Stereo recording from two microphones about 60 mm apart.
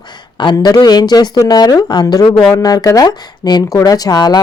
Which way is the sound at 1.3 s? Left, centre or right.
Left.